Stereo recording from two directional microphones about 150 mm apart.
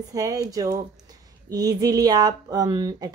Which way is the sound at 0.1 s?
25° right (ahead or behind).